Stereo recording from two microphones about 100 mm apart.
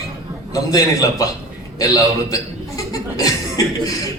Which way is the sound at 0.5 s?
35° left (ahead or behind).